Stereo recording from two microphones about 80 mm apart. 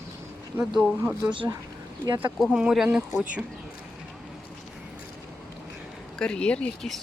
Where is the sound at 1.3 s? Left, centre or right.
Right.